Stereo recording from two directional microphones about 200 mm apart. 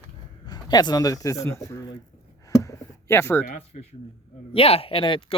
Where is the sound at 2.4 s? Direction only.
15° left (ahead or behind).